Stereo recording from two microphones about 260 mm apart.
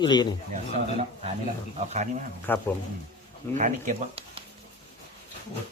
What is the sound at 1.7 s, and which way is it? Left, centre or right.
Speech, right.